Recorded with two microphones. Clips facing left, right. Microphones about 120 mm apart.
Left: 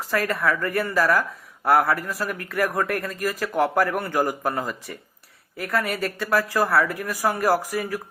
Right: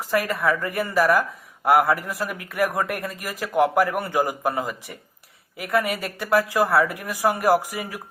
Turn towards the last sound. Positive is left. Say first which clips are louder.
# right 1 dB
turn(degrees=-15)  # may be behind; listen again after turning